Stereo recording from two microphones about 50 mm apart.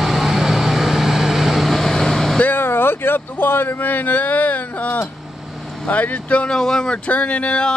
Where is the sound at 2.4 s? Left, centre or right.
Left.